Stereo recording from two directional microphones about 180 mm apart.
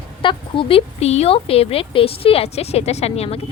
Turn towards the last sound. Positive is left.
turn(degrees=35)  # may be behind; listen again after turning